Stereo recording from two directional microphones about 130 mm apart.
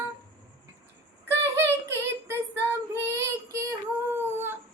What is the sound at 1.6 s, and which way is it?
Child singing, 20° right (ahead or behind).